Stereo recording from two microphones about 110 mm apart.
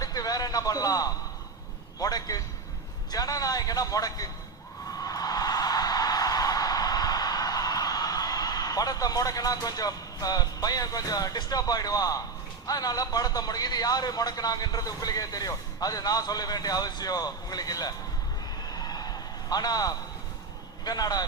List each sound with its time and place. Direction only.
0.0 s a sound: 35° left (ahead or behind)
2.0 s a man's voice: 35° left (ahead or behind)
4.9 s music: 35° left (ahead or behind)
12.6 s a man's voice: 35° left (ahead or behind)
18.7 s a sound: 35° left (ahead or behind)
20.8 s a man's voice: 35° left (ahead or behind)